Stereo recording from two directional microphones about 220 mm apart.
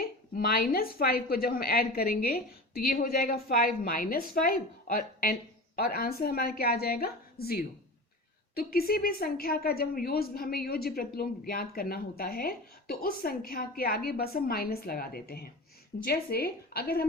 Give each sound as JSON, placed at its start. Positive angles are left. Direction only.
{"t": 0.0, "sound": "a woman's voice", "side_deg": 40}